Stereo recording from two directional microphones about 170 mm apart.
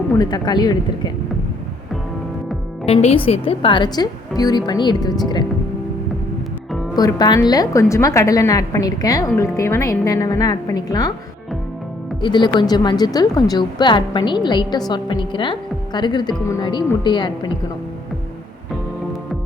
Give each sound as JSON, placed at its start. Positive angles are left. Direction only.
{"t": 0.2, "sound": "a woman's voice", "side_deg": 25}
{"t": 2.8, "sound": "a woman's voice", "side_deg": 35}
{"t": 6.9, "sound": "a woman's voice", "side_deg": 25}
{"t": 12.2, "sound": "a woman's voice", "side_deg": 25}